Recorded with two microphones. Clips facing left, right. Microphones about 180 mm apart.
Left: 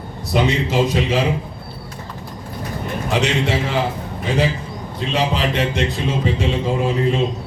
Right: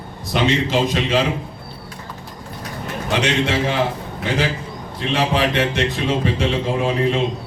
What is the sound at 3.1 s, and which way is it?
Speech, 90° right.